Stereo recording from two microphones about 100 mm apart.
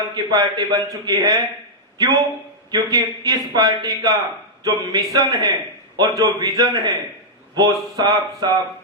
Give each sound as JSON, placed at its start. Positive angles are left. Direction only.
{"t": 0.1, "sound": "a man's voice", "side_deg": -45}